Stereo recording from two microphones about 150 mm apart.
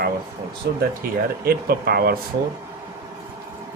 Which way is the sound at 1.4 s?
90° right.